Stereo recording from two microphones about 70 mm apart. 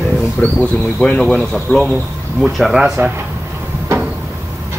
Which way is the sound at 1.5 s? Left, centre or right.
Centre.